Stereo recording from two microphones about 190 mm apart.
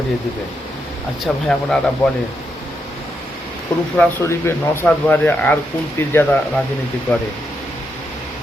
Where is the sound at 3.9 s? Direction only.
10° left (ahead or behind).